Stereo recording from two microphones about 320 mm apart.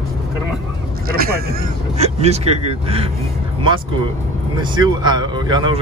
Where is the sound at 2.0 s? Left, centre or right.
Centre.